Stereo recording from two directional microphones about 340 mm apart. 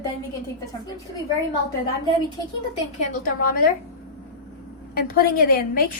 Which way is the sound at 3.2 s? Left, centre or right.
Left.